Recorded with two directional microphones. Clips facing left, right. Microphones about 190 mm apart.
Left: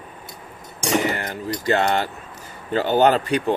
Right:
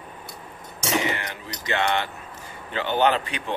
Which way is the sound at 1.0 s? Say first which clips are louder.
Left 4 dB; 40° left (ahead or behind).